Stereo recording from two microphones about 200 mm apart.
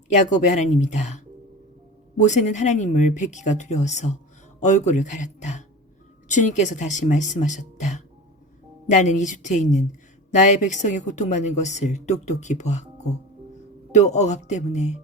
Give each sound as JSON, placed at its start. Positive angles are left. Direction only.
{"t": 0.1, "sound": "a woman's voice", "side_deg": 40}
{"t": 2.1, "sound": "a woman's voice", "side_deg": 35}